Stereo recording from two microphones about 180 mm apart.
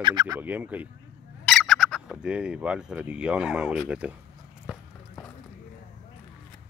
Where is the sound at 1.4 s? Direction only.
Centre (ahead or behind).